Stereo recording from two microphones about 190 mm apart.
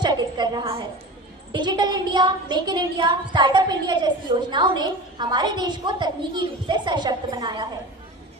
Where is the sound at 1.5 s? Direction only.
20° right (ahead or behind).